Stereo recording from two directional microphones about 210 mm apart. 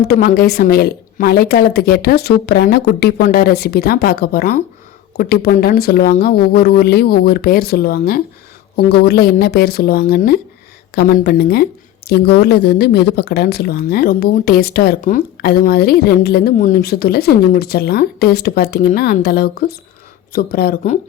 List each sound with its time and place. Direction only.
0.0 s speech: 45° left (ahead or behind)